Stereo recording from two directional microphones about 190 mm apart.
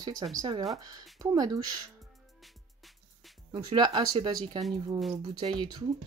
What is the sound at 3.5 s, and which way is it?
Speech, 25° right (ahead or behind).